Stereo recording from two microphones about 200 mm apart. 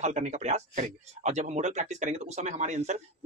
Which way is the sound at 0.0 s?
35° right (ahead or behind).